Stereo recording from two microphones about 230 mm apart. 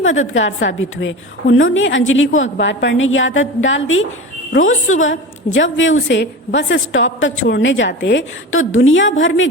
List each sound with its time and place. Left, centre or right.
0.0 s a woman's voice: left